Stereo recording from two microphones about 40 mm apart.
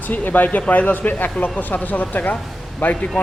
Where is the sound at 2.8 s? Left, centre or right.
Left.